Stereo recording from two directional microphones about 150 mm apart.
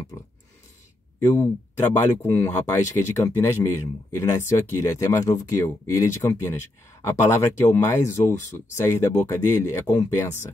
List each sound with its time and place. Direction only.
1.3 s speech: 20° left (ahead or behind)